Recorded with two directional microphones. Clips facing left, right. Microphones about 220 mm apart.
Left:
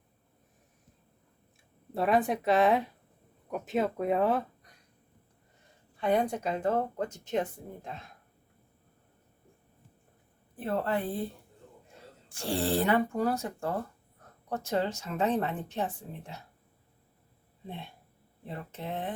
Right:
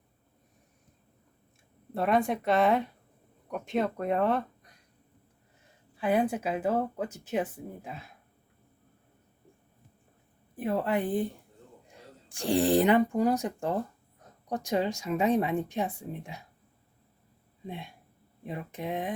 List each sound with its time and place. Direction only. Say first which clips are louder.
1.9 s a woman's voice: even; centre (ahead or behind)
6.0 s speech: right 1 dB; 5° right (ahead or behind)
10.6 s speech: right 2 dB; 15° right (ahead or behind)
12.3 s speech: right 5 dB; 15° right (ahead or behind)
17.7 s speech: right 2 dB; 10° right (ahead or behind)